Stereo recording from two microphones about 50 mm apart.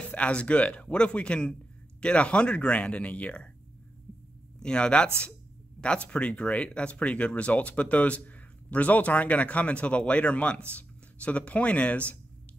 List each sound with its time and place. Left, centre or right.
0.1 s speech: left
4.6 s speech: centre